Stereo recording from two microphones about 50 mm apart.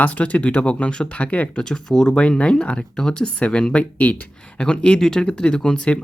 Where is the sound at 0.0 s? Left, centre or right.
Left.